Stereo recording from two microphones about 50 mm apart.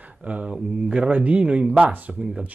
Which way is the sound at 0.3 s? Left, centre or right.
Right.